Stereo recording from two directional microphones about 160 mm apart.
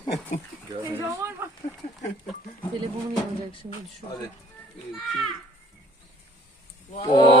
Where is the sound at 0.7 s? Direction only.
20° right (ahead or behind).